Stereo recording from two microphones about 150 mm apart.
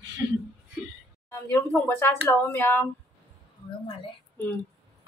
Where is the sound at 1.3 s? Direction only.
15° left (ahead or behind).